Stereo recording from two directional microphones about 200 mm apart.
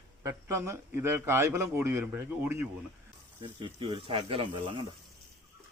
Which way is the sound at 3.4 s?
25° right (ahead or behind).